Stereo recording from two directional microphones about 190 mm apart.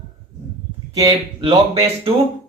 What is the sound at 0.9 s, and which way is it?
A man's voice, 20° right (ahead or behind).